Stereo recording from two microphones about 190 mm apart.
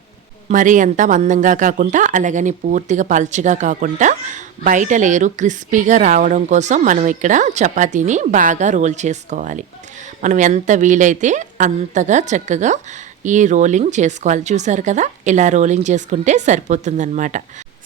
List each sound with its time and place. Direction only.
0.4 s speech: 40° right (ahead or behind)